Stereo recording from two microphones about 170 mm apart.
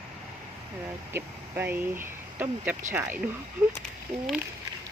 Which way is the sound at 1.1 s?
10° right (ahead or behind).